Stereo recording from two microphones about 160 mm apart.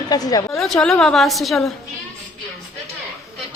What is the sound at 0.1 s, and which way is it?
Speech, 25° left (ahead or behind).